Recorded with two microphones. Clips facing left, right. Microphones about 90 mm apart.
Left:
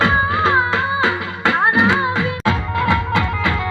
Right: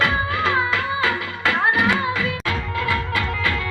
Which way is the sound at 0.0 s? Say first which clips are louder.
Left 5 dB; 30° left (ahead or behind).